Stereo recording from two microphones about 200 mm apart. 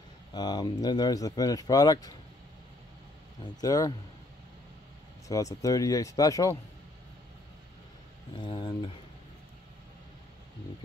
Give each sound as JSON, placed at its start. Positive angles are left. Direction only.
{"t": 0.3, "sound": "speech", "side_deg": 20}
{"t": 3.6, "sound": "speech", "side_deg": 15}
{"t": 5.3, "sound": "speech", "side_deg": 15}
{"t": 8.4, "sound": "speech", "side_deg": 25}